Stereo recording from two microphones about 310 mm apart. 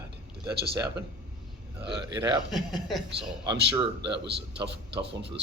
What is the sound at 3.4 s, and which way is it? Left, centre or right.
Speech, centre.